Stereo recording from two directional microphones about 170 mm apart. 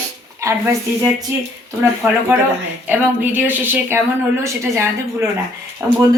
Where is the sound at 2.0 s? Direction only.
10° right (ahead or behind).